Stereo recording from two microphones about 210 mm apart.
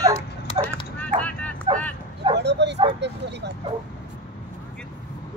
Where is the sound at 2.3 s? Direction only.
55° right (ahead or behind).